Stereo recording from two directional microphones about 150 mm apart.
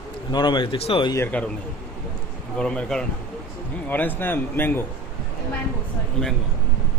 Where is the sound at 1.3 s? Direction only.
10° left (ahead or behind).